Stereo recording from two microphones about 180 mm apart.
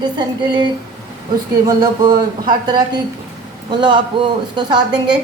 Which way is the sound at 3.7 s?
25° right (ahead or behind).